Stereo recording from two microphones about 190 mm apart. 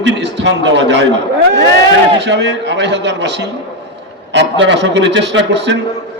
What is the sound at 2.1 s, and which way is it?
A man's voice, 65° right (ahead or behind).